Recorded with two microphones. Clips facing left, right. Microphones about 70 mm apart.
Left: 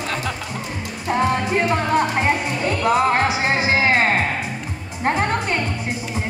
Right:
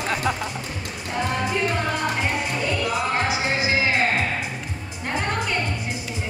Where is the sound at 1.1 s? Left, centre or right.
Left.